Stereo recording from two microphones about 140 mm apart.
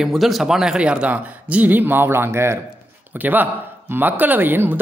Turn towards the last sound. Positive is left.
turn(degrees=-15)  # may be behind; listen again after turning